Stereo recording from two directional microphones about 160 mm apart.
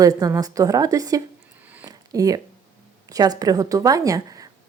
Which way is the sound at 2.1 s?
20° right (ahead or behind).